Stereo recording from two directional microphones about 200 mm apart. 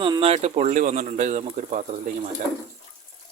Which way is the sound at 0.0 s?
25° right (ahead or behind).